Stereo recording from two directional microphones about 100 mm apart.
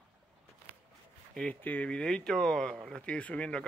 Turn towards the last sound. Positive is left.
turn(degrees=10)  # may be behind; listen again after turning